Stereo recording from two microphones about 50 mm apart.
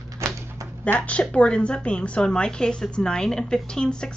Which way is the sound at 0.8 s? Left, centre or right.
Left.